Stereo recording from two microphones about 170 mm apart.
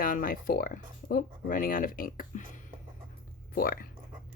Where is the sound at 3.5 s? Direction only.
60° left (ahead or behind).